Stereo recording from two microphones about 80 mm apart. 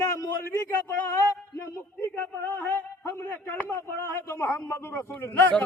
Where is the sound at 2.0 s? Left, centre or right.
Left.